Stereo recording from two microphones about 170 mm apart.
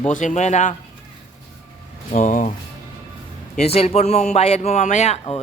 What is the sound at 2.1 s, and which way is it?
Speech, 45° left (ahead or behind).